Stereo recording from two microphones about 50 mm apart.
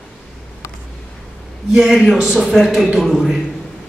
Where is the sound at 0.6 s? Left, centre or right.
Left.